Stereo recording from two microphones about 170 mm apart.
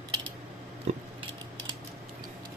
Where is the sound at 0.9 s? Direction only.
40° right (ahead or behind).